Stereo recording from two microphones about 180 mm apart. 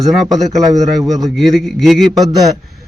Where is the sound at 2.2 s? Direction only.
20° right (ahead or behind).